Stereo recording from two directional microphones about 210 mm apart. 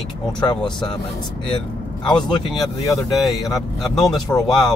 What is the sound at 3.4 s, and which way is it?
Speech, 15° left (ahead or behind).